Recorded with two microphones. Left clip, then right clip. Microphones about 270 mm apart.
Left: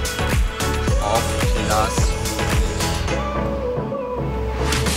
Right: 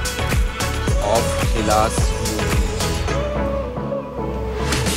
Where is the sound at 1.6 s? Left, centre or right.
Centre.